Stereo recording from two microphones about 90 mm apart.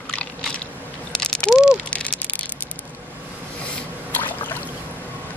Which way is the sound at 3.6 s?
15° left (ahead or behind).